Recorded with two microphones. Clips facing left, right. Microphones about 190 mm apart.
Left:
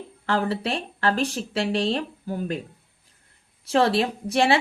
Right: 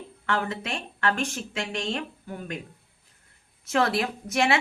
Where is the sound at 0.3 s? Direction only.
35° left (ahead or behind).